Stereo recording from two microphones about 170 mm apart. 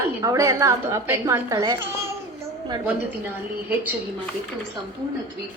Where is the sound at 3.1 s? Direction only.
10° right (ahead or behind).